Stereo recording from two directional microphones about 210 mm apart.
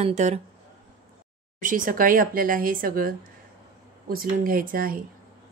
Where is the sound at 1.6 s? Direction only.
40° right (ahead or behind).